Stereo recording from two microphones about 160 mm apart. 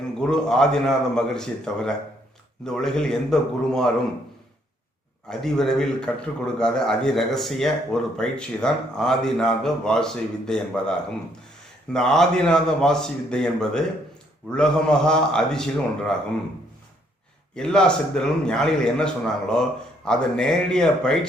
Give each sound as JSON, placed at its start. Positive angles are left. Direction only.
{"t": 0.3, "sound": "a man's voice", "side_deg": 5}
{"t": 5.3, "sound": "a man's voice", "side_deg": 5}
{"t": 17.5, "sound": "a man's voice", "side_deg": 5}